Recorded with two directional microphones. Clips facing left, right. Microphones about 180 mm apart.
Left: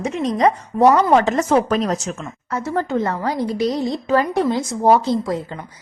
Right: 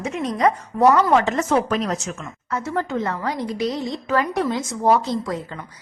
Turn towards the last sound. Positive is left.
turn(degrees=30)  # may be behind; listen again after turning